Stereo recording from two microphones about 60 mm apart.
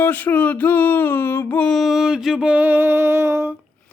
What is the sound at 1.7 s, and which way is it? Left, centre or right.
Mantra, centre.